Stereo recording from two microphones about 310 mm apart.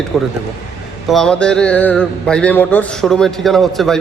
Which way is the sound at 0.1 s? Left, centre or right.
Centre.